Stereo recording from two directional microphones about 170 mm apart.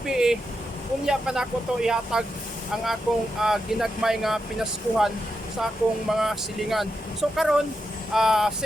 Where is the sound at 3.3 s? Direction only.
Centre (ahead or behind).